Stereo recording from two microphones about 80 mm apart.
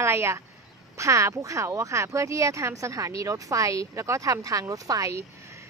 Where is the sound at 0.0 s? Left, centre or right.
Right.